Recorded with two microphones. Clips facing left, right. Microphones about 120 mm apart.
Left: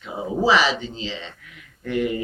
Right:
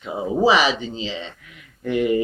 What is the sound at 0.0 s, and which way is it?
Speech, 15° right (ahead or behind).